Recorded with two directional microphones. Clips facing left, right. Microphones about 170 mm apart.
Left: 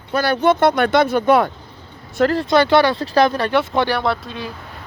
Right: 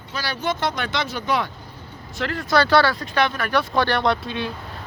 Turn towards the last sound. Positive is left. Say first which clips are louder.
# even
turn(degrees=0)  # may be behind; listen again after turning